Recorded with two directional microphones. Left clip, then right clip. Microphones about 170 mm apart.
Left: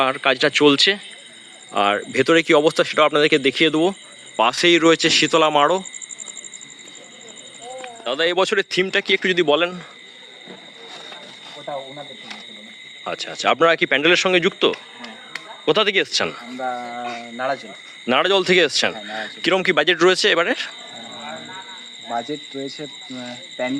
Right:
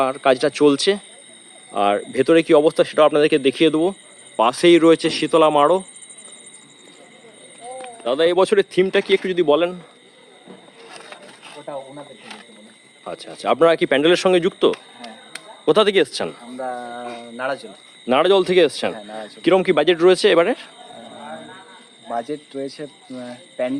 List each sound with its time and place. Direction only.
0.0 s speech: 5° right (ahead or behind)
8.0 s speech: 10° right (ahead or behind)
13.1 s speech: 5° right (ahead or behind)
15.6 s speech: 35° right (ahead or behind)
16.8 s speech: 30° right (ahead or behind)
18.0 s speech: centre (ahead or behind)
22.0 s speech: 30° right (ahead or behind)